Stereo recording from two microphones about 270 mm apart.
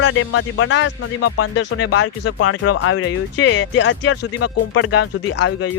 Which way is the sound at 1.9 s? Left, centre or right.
Left.